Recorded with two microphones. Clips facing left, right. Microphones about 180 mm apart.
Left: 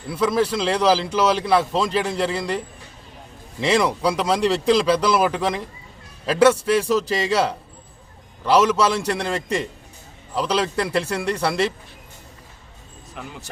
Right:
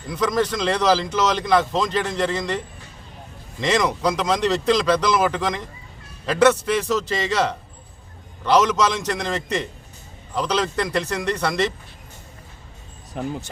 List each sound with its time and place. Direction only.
0.1 s speech: 10° left (ahead or behind)
13.2 s speech: 35° right (ahead or behind)